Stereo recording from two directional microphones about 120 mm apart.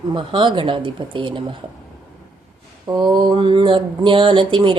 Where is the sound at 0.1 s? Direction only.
45° right (ahead or behind).